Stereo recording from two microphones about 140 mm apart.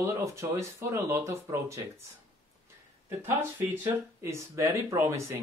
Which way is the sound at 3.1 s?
15° right (ahead or behind).